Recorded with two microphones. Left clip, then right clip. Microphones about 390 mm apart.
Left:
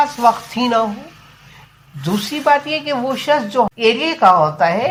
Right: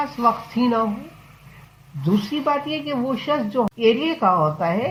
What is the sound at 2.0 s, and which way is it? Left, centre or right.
A woman's voice, left.